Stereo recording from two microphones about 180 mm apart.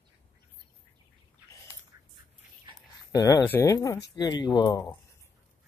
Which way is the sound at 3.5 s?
15° left (ahead or behind).